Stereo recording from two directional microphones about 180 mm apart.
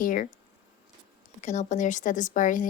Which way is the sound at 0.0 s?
50° left (ahead or behind).